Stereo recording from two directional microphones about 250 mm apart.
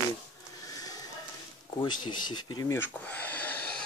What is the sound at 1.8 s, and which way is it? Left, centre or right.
Speech, centre.